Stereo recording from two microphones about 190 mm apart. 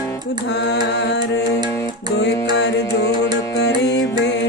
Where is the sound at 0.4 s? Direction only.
65° left (ahead or behind).